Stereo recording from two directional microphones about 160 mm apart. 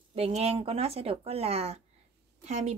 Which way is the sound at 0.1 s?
40° right (ahead or behind).